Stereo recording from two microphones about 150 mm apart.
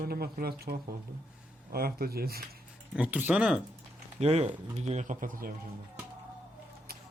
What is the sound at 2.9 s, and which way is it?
Speech, 10° right (ahead or behind).